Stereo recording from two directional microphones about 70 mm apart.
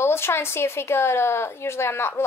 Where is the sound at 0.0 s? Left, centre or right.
Left.